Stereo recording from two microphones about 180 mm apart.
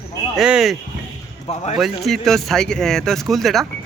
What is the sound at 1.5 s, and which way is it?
Speech, 35° left (ahead or behind).